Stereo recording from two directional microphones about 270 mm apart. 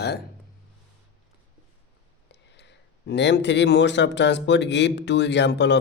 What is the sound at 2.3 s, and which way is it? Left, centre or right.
Speech, left.